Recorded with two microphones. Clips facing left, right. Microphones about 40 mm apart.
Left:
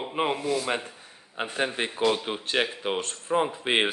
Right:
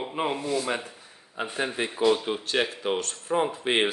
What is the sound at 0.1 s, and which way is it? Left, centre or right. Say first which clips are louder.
Speech: left 3 dB; centre.